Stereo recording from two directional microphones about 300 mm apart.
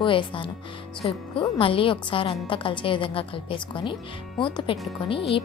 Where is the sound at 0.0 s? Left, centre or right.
Centre.